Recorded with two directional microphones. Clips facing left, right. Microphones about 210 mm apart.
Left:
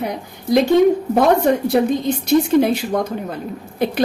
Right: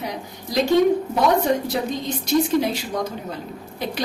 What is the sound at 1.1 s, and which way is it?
A woman's voice, 55° left (ahead or behind).